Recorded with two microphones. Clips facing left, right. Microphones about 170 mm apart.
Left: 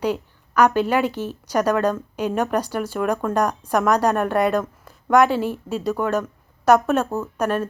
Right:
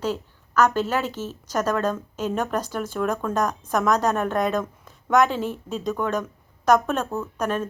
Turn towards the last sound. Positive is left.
turn(degrees=10)  # may be behind; listen again after turning